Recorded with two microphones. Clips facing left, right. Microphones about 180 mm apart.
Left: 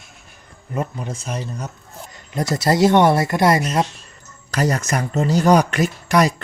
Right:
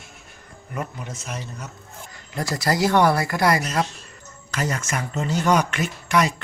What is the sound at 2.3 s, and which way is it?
Speech, 20° left (ahead or behind).